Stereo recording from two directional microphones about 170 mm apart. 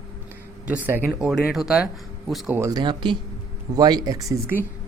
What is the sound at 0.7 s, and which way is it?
Speech, 10° right (ahead or behind).